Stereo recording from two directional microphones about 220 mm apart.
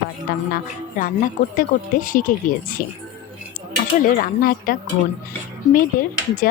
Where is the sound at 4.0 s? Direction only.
40° left (ahead or behind).